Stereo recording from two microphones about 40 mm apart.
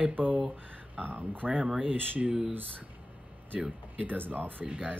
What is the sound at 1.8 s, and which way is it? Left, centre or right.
Speech, right.